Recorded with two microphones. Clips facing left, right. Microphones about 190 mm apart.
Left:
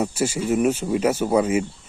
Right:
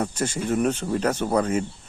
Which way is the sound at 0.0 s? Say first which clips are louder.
Left 3 dB; 10° left (ahead or behind).